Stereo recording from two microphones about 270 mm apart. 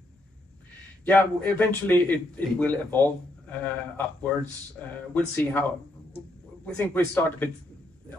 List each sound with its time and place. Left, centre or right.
1.0 s a man's voice: centre